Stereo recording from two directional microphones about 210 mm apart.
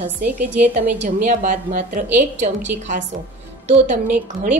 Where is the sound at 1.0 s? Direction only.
40° right (ahead or behind).